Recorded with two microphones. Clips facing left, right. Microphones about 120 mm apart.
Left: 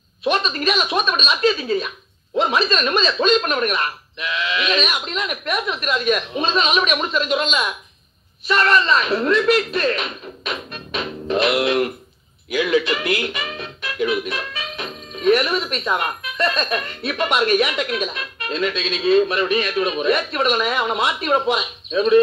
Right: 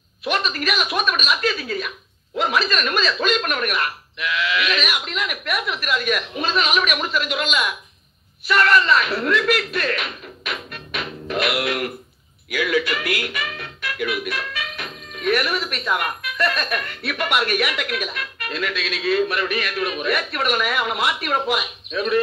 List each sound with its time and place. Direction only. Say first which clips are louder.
0.2 s speech: left 3 dB; 25° left (ahead or behind)